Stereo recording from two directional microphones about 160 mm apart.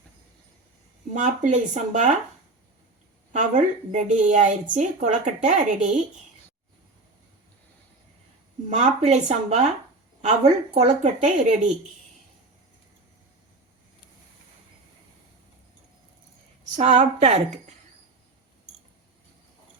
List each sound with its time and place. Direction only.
1.1 s a woman's voice: 50° right (ahead or behind)
3.3 s a woman's voice: 50° right (ahead or behind)
8.7 s a woman's voice: 45° right (ahead or behind)
16.7 s a woman's voice: 45° right (ahead or behind)